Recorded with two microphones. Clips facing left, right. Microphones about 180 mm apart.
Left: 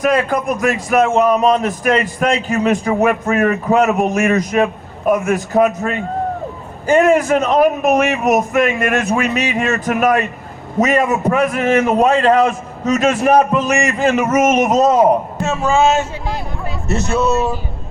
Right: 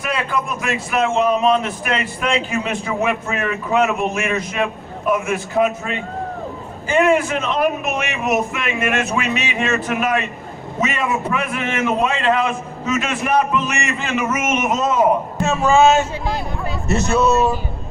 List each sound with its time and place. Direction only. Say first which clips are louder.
0.0 s a man's voice: left 7 dB; 45° left (ahead or behind)